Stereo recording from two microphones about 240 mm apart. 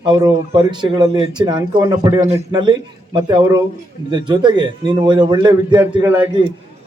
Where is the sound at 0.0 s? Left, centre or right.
Centre.